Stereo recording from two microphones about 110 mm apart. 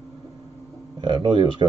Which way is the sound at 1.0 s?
45° right (ahead or behind).